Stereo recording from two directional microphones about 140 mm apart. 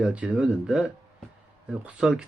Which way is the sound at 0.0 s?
10° right (ahead or behind).